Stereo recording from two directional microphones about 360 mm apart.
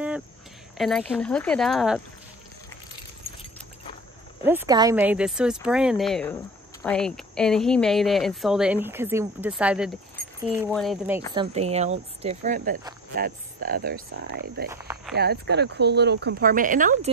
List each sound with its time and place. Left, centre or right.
0.7 s speech: centre
4.5 s speech: centre
11.3 s speech: centre
14.7 s speech: centre
15.1 s speech: right